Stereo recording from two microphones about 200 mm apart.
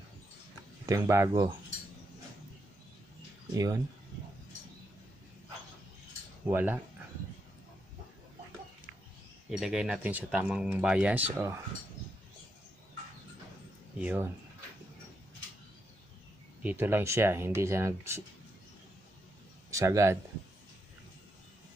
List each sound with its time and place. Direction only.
0.8 s speech: 15° right (ahead or behind)
3.5 s speech: 15° right (ahead or behind)
6.4 s speech: 10° right (ahead or behind)
9.5 s speech: centre (ahead or behind)
13.9 s speech: 10° right (ahead or behind)
16.6 s speech: 10° right (ahead or behind)
19.7 s speech: 15° right (ahead or behind)